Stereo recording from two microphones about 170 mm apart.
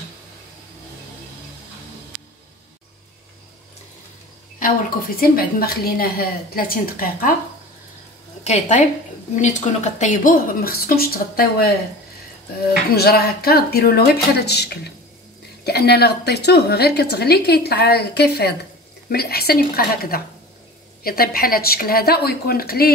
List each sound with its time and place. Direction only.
5.2 s a woman's voice: 60° left (ahead or behind)
8.5 s a woman's voice: 40° left (ahead or behind); by 11.7 s 65° left (ahead or behind)
12.9 s a woman's voice: 70° left (ahead or behind)